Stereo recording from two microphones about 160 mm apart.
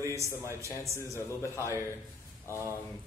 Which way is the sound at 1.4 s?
20° left (ahead or behind).